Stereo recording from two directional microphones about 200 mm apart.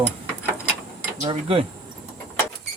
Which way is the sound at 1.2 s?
30° right (ahead or behind).